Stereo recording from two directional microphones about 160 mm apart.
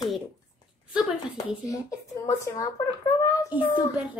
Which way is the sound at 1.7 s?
20° left (ahead or behind).